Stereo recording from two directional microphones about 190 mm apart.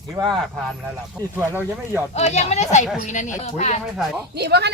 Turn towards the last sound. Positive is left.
turn(degrees=-60)  # may be behind; listen again after turning